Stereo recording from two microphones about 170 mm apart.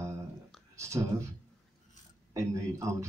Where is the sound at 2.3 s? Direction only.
20° right (ahead or behind).